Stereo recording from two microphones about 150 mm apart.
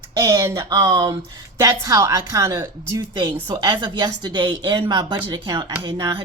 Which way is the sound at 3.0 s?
30° right (ahead or behind).